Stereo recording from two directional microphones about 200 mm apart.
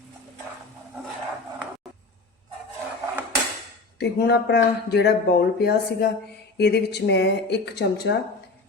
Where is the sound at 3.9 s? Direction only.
55° left (ahead or behind).